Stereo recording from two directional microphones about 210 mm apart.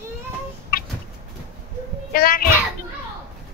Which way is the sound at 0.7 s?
45° left (ahead or behind).